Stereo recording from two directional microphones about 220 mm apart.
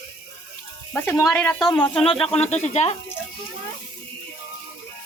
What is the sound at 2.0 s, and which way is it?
Speech, 25° left (ahead or behind).